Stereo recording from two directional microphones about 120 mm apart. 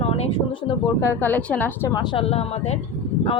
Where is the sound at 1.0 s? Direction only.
20° left (ahead or behind).